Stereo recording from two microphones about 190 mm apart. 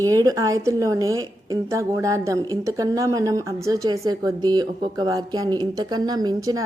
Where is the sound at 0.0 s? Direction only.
20° right (ahead or behind).